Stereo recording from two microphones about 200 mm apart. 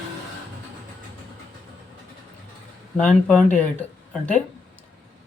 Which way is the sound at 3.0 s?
5° left (ahead or behind).